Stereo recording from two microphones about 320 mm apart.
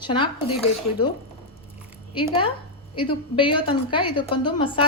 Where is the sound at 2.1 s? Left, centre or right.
Centre.